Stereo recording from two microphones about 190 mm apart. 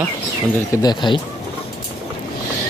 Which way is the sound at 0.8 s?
25° left (ahead or behind).